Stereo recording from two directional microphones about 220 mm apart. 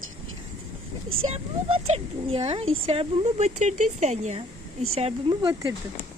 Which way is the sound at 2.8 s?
25° right (ahead or behind).